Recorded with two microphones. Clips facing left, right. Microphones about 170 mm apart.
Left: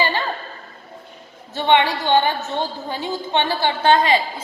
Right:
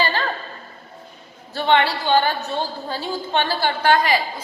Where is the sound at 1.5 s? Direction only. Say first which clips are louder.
Left 1 dB; 20° left (ahead or behind).